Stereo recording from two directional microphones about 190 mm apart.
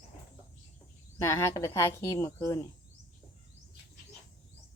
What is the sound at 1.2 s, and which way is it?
Speech, 15° left (ahead or behind).